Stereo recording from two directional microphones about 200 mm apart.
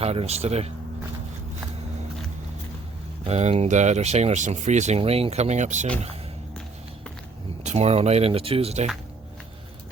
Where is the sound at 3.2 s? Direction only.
35° right (ahead or behind).